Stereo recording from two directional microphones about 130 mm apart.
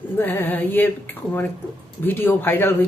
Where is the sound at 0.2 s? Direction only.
15° left (ahead or behind).